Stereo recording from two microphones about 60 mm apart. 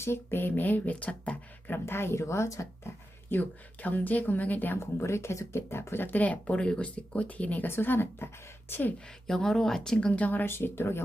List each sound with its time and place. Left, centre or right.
0.0 s speech: left
1.9 s speech: left
2.8 s a sound: left
3.8 s speech: left
4.8 s speech: left
7.7 s speech: left
9.2 s speech: centre
10.1 s speech: left